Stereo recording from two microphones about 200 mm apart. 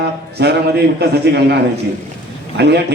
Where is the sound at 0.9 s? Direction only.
55° right (ahead or behind).